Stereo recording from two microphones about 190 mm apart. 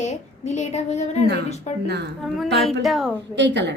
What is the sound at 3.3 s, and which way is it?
Speech, 70° right (ahead or behind).